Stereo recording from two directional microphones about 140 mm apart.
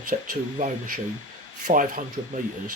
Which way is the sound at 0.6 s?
65° right (ahead or behind).